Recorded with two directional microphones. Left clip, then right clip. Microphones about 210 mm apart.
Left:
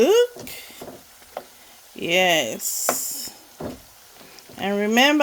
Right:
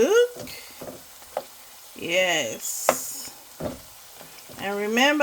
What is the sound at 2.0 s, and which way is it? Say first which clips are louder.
Speech: left 4 dB; 50° left (ahead or behind).